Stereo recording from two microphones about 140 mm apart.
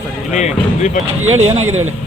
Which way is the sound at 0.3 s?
55° left (ahead or behind).